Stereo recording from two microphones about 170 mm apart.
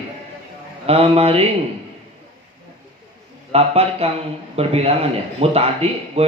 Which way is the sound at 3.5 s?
35° right (ahead or behind).